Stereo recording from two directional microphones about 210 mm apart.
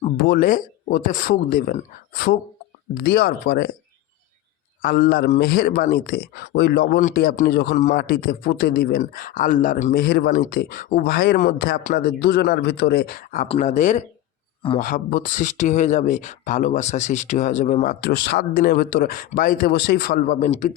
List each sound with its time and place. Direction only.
0.3 s a man's voice: 40° left (ahead or behind)
4.8 s a man's voice: 40° left (ahead or behind)